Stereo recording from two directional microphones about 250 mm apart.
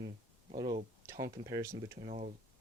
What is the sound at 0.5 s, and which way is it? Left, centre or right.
Speech, centre.